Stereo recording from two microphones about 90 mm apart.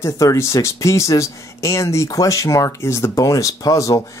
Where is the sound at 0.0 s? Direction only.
35° left (ahead or behind).